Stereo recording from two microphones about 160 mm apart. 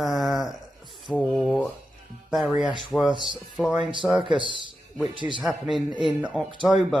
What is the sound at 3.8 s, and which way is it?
Speech, 30° right (ahead or behind).